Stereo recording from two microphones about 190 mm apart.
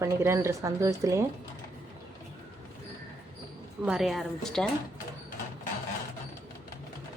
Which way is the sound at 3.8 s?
Centre (ahead or behind).